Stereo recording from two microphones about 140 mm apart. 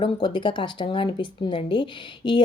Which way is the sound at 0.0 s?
35° left (ahead or behind).